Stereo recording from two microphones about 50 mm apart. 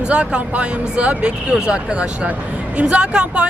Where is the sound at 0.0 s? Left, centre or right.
Right.